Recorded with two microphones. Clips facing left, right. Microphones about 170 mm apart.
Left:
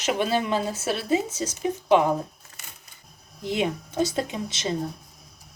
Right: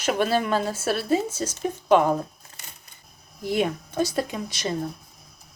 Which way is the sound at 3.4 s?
20° left (ahead or behind).